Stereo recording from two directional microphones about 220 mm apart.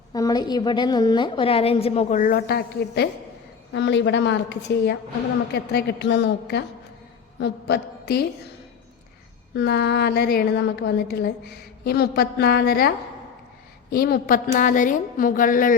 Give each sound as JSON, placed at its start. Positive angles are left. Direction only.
{"t": 0.1, "sound": "a woman's voice", "side_deg": 15}
{"t": 9.6, "sound": "a woman's voice", "side_deg": 50}
{"t": 13.9, "sound": "a woman's voice", "side_deg": 40}